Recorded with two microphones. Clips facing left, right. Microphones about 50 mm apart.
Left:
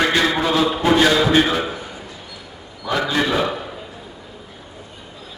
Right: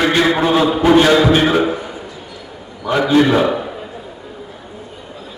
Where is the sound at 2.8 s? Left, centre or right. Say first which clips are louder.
Right 7 dB; right.